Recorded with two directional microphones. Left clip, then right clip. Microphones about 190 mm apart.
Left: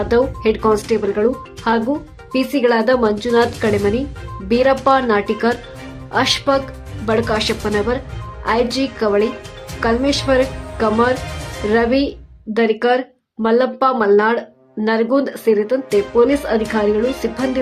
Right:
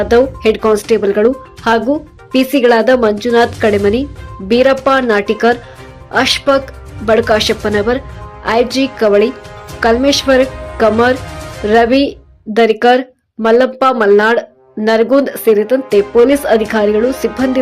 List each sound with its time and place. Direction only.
0.0 s speech: 15° right (ahead or behind)